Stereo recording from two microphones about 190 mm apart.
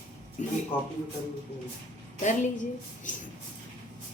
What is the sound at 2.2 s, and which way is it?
A woman's voice, 40° left (ahead or behind).